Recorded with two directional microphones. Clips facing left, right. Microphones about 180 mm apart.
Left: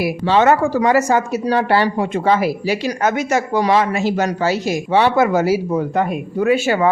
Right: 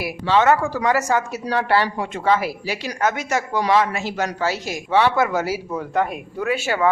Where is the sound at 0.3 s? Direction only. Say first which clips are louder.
Left 3 dB; 30° left (ahead or behind).